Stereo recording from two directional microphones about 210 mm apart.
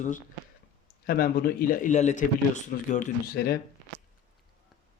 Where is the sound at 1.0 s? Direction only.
45° left (ahead or behind).